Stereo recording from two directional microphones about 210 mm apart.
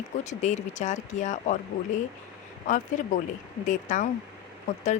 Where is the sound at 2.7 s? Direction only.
35° left (ahead or behind).